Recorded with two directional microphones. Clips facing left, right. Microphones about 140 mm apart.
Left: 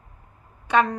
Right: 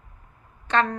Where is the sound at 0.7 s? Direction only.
10° left (ahead or behind).